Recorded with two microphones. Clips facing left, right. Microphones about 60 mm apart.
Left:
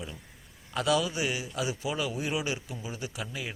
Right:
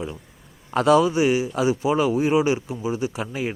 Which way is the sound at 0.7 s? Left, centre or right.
Right.